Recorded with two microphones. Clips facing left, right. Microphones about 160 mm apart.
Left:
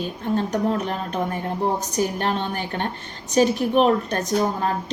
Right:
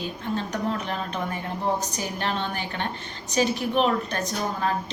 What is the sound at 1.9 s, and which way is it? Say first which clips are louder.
A woman's voice: left 6 dB; 50° left (ahead or behind).